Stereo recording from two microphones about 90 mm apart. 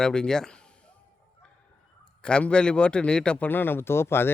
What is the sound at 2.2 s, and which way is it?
A man's voice, 10° left (ahead or behind).